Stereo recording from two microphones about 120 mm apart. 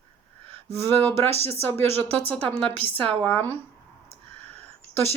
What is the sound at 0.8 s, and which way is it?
Speech, 20° left (ahead or behind).